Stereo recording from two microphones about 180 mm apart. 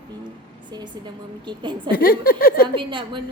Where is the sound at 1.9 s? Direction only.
55° left (ahead or behind).